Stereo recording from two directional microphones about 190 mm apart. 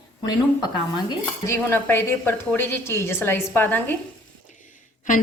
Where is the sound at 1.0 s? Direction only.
15° left (ahead or behind).